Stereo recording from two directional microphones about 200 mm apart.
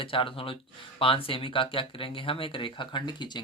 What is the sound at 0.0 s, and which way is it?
Speech, 25° left (ahead or behind).